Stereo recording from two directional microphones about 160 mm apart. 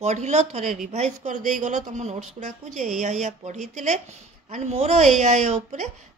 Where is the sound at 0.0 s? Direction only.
45° right (ahead or behind).